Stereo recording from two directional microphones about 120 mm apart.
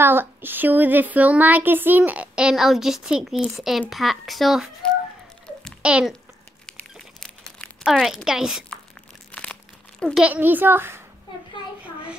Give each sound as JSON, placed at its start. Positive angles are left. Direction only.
{"t": 0.0, "sound": "a child's voice", "side_deg": -20}
{"t": 6.6, "sound": "crumpling", "side_deg": 5}
{"t": 9.3, "sound": "crumpling", "side_deg": 10}
{"t": 10.1, "sound": "speech", "side_deg": -10}
{"t": 11.8, "sound": "a sound", "side_deg": -10}